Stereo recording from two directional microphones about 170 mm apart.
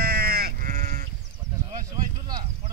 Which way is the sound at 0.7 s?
45° right (ahead or behind).